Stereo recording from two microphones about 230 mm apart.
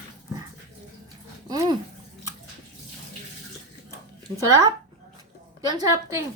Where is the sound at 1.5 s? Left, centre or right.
Centre.